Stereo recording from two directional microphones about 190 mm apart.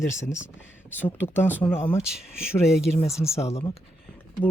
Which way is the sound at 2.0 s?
5° right (ahead or behind).